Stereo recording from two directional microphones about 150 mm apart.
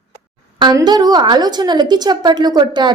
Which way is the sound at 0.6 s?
30° right (ahead or behind).